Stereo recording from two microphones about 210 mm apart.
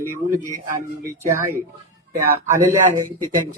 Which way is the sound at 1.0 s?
15° right (ahead or behind).